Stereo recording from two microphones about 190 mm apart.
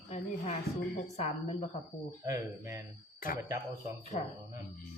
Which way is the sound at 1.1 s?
35° left (ahead or behind).